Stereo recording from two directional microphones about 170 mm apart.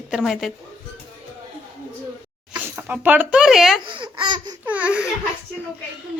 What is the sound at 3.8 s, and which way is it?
Speech, 30° right (ahead or behind).